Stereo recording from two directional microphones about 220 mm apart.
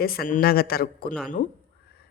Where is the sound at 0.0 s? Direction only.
40° left (ahead or behind).